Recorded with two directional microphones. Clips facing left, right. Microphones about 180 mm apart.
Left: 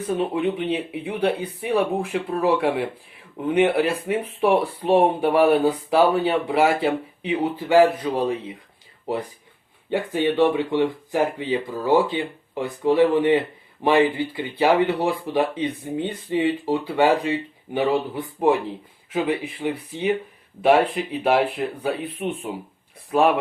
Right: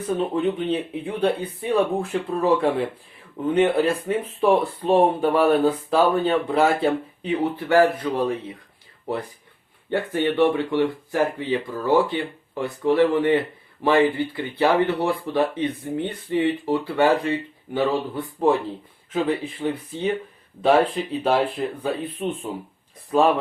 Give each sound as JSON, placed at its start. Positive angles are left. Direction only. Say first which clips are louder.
{"t": 0.2, "sound": "speech", "louder": "right 1 dB", "side_deg": 10}
{"t": 9.9, "sound": "speech", "louder": "left 1 dB", "side_deg": 15}